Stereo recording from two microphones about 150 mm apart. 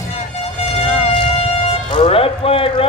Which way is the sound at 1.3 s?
45° left (ahead or behind).